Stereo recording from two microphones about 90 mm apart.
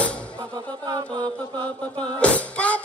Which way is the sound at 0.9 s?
55° right (ahead or behind).